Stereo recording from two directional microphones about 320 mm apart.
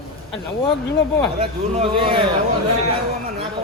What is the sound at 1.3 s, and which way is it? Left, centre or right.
Speech, centre.